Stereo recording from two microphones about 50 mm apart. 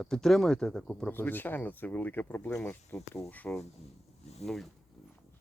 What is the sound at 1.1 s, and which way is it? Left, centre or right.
Speech, left.